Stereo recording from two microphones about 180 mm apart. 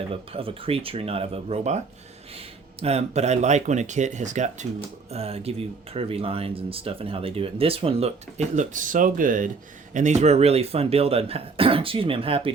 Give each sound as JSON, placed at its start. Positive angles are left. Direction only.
{"t": 0.1, "sound": "speech", "side_deg": -30}
{"t": 2.8, "sound": "speech", "side_deg": -35}